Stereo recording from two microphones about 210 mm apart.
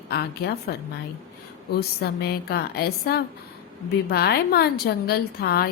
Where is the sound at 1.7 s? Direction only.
50° left (ahead or behind).